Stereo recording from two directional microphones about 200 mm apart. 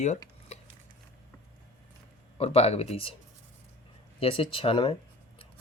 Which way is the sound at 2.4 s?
30° left (ahead or behind).